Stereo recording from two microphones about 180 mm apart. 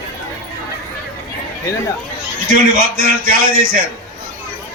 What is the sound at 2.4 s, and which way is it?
Music, 50° right (ahead or behind).